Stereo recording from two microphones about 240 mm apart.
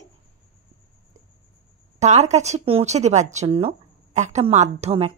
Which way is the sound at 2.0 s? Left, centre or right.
Right.